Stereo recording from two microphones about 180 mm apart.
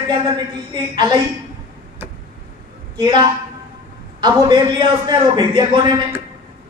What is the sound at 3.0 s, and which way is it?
Speech, 25° right (ahead or behind).